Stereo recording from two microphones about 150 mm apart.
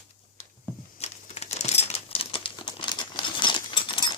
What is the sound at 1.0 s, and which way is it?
Crumpling, 45° left (ahead or behind).